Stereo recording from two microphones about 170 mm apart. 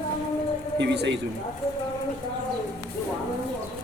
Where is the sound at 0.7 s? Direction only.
90° right.